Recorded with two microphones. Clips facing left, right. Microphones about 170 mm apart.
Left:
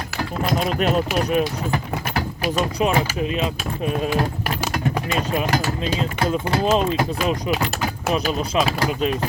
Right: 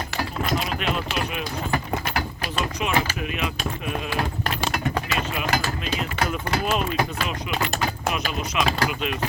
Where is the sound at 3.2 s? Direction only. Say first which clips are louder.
Left 5 dB; 30° left (ahead or behind).